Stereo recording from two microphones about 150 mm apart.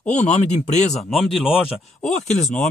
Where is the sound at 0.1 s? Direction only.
50° left (ahead or behind).